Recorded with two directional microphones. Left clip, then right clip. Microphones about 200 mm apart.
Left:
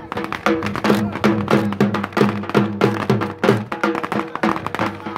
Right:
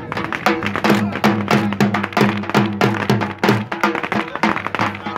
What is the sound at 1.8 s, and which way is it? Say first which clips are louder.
Music: right 1 dB; 40° right (ahead or behind).